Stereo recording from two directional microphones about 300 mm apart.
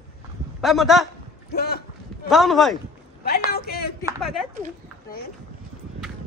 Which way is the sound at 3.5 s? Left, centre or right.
Left.